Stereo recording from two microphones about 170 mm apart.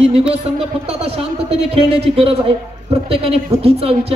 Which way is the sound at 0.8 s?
35° right (ahead or behind).